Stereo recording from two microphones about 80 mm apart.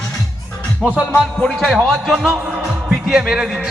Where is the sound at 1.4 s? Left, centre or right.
Centre.